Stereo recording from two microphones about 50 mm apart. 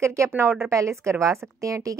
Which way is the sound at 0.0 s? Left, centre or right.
Right.